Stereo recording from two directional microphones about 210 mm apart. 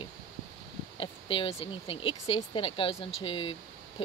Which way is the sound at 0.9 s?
25° left (ahead or behind).